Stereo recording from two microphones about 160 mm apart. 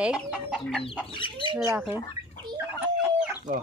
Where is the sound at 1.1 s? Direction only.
30° left (ahead or behind).